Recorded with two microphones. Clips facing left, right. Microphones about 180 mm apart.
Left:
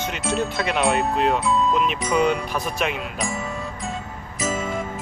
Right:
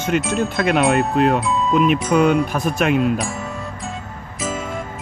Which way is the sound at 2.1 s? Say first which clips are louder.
Right 3 dB; 50° right (ahead or behind).